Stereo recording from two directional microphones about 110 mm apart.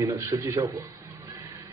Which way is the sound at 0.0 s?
30° right (ahead or behind).